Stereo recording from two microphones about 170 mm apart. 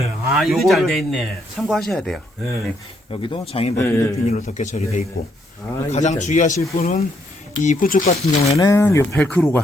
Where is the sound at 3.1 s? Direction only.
30° left (ahead or behind).